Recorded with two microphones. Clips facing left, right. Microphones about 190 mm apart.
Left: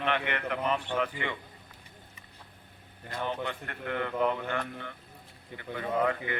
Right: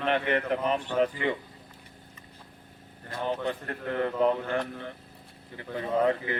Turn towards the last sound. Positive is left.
turn(degrees=-30)  # may be behind; listen again after turning